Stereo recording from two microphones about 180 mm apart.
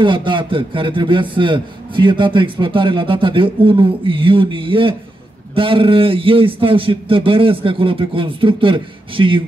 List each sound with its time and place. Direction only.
0.0 s a man's voice: 25° right (ahead or behind)